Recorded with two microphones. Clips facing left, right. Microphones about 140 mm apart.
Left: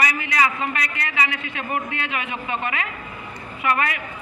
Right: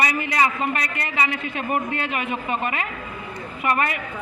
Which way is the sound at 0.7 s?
40° right (ahead or behind).